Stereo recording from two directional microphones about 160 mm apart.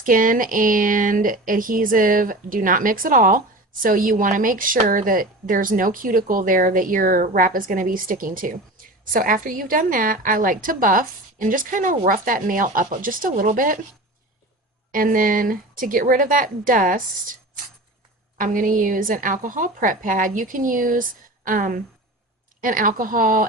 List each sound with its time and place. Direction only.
0.0 s speech: 60° right (ahead or behind)
14.9 s speech: 60° right (ahead or behind)
18.3 s speech: 55° right (ahead or behind)